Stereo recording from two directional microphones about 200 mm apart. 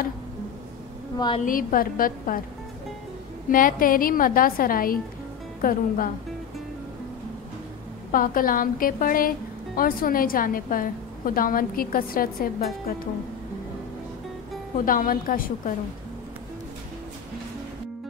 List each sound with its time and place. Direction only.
1.1 s a woman's voice: 20° left (ahead or behind)
1.4 s a woman's voice: 45° left (ahead or behind)
3.4 s a woman's voice: 45° left (ahead or behind)
8.1 s a woman's voice: 45° left (ahead or behind)
14.9 s a woman's voice: 45° left (ahead or behind)